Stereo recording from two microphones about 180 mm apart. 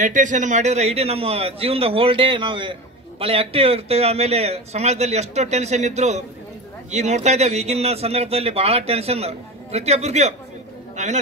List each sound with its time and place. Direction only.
0.0 s a man's voice: 45° right (ahead or behind)